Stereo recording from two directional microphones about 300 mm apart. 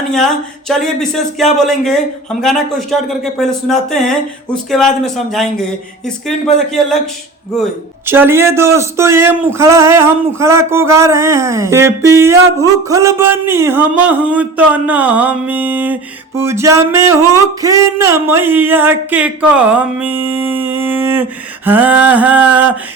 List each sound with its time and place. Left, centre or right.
0.1 s a man's voice: centre
8.0 s a man's voice: centre